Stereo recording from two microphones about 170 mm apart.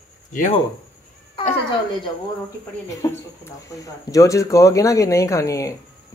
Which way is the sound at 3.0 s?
20° left (ahead or behind).